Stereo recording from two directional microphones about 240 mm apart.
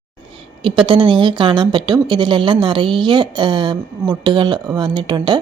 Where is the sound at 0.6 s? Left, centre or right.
Right.